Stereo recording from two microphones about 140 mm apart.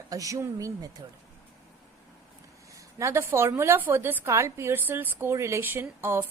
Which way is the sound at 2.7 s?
20° right (ahead or behind).